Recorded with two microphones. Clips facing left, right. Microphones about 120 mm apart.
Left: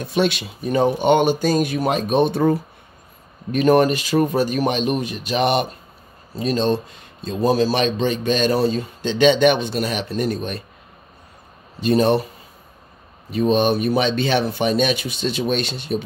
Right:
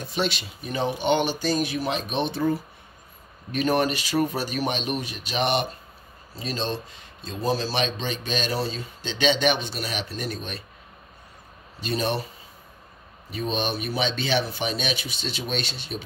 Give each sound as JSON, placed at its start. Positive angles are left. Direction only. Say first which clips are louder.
{"t": 0.0, "sound": "speech", "louder": "left 7 dB", "side_deg": 60}
{"t": 0.8, "sound": "speech", "louder": "left 6 dB", "side_deg": 45}
{"t": 3.5, "sound": "speech", "louder": "left 8 dB", "side_deg": 50}
{"t": 11.8, "sound": "speech", "louder": "left 10 dB", "side_deg": 45}
{"t": 13.3, "sound": "speech", "louder": "left 10 dB", "side_deg": 45}